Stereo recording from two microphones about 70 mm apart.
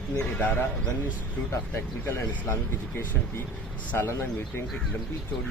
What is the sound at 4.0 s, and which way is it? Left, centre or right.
Speech, left.